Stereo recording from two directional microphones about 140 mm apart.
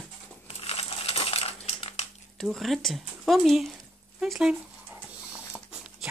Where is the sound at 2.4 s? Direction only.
Centre (ahead or behind).